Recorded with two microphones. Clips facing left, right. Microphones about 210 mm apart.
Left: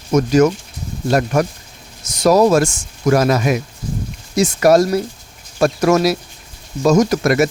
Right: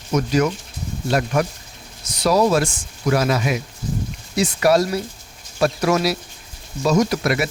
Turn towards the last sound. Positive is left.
turn(degrees=45)  # may be behind; listen again after turning